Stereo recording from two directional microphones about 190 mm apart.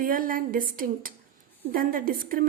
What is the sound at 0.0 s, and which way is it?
A woman's voice, 50° right (ahead or behind).